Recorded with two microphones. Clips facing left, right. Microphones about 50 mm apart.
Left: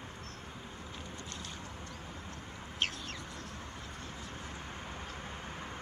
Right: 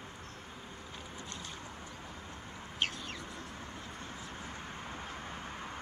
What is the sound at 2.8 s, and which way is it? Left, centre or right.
Bird, centre.